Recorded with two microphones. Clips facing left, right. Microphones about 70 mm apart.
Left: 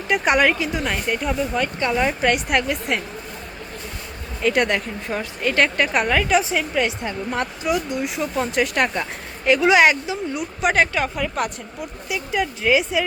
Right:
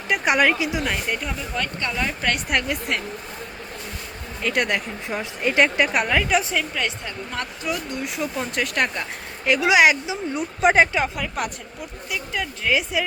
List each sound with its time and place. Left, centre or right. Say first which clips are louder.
0.1 s a woman's voice: left 2 dB; centre
2.3 s a woman's voice: left 3 dB; centre
4.4 s a woman's voice: left 4 dB; centre
5.2 s a woman's voice: right 1 dB; centre
8.0 s a woman's voice: left 3 dB; centre
10.3 s speech: right 3 dB; right
11.2 s a woman's voice: left 3 dB; centre